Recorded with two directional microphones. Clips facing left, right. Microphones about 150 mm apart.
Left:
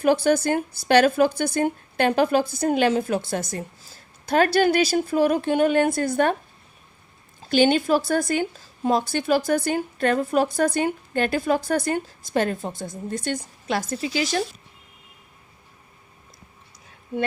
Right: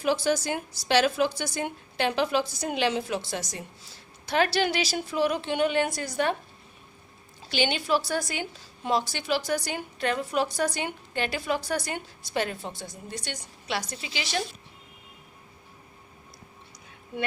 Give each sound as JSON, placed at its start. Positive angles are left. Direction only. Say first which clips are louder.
{"t": 0.0, "sound": "a woman's voice", "louder": "left 6 dB", "side_deg": 55}
{"t": 7.5, "sound": "a woman's voice", "louder": "left 8 dB", "side_deg": 50}